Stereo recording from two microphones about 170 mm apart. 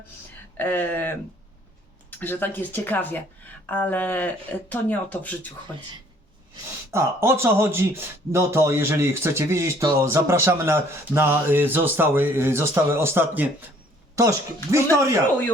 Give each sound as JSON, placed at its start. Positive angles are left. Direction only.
{"t": 0.5, "sound": "speech", "side_deg": 10}
{"t": 6.9, "sound": "speech", "side_deg": -15}